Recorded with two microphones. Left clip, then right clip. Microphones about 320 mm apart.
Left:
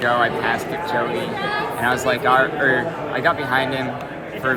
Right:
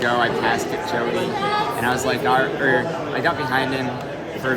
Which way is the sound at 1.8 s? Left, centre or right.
Centre.